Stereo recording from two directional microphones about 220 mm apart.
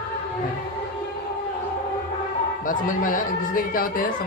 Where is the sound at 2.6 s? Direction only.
35° left (ahead or behind).